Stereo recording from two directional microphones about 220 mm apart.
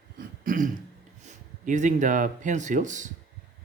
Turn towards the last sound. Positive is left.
turn(degrees=-35)  # may be behind; listen again after turning